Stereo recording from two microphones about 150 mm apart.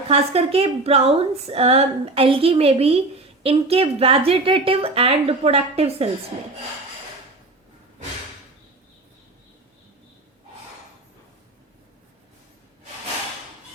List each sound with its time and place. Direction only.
0.1 s a woman's voice: 40° right (ahead or behind)